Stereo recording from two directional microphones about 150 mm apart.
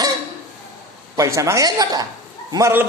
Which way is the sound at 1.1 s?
20° right (ahead or behind).